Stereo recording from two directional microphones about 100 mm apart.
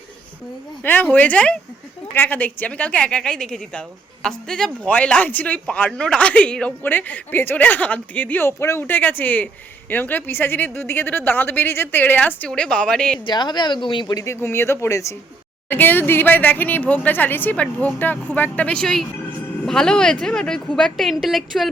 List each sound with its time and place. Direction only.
0.8 s speech: 15° left (ahead or behind)
4.9 s speech: 15° left (ahead or behind)
13.1 s speech: 50° left (ahead or behind)
14.3 s speech: 25° left (ahead or behind)
15.7 s a woman's voice: 20° left (ahead or behind); by 21.7 s centre (ahead or behind)